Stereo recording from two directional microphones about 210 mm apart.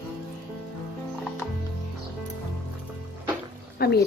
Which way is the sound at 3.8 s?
50° left (ahead or behind).